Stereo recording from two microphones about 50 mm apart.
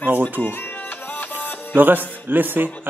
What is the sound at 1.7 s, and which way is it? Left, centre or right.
Speech, right.